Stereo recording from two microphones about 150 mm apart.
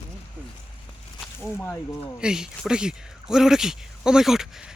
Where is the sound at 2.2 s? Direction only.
5° right (ahead or behind).